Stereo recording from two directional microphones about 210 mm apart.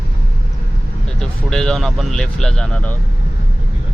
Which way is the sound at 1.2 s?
Centre (ahead or behind).